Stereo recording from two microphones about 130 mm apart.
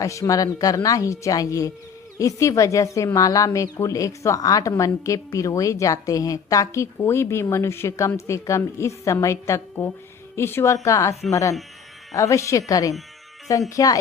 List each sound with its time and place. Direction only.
0.0 s a woman's voice: 25° left (ahead or behind)